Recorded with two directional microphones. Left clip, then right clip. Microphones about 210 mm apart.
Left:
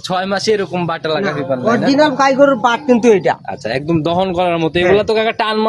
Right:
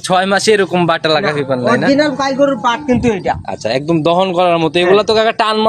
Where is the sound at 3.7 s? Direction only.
15° right (ahead or behind).